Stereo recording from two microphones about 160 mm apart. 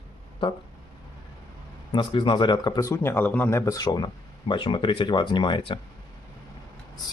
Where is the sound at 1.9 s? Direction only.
30° left (ahead or behind).